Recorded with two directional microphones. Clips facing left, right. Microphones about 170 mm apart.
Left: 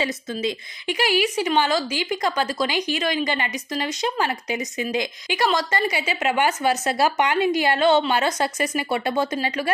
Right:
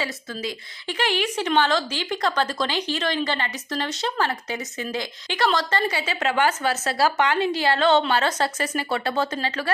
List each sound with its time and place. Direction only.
0.0 s speech: 20° left (ahead or behind)
0.9 s speech: 10° left (ahead or behind)